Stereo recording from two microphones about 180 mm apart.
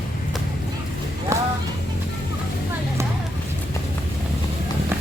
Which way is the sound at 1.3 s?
15° right (ahead or behind).